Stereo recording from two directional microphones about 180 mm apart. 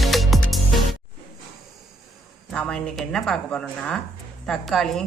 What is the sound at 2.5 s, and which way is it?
Speech, 5° left (ahead or behind).